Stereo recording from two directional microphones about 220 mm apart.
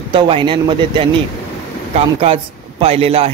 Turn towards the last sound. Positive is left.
turn(degrees=-25)  # may be behind; listen again after turning